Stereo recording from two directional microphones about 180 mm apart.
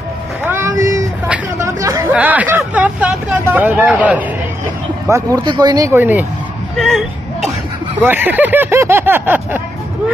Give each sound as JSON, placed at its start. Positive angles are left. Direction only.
{"t": 0.5, "sound": "a sound", "side_deg": -15}
{"t": 1.3, "sound": "chatter", "side_deg": -15}
{"t": 2.1, "sound": "speech", "side_deg": -10}
{"t": 5.0, "sound": "speech", "side_deg": -20}
{"t": 8.0, "sound": "speech", "side_deg": -10}